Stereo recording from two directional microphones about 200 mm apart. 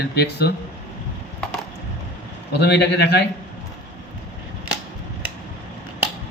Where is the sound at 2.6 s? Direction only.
55° left (ahead or behind).